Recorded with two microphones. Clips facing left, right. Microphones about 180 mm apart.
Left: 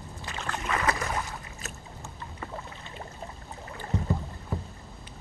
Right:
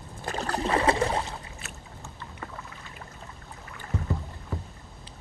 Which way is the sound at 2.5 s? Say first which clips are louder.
Left 3 dB; 30° left (ahead or behind).